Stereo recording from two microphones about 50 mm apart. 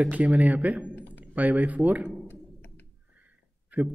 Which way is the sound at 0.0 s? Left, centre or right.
Right.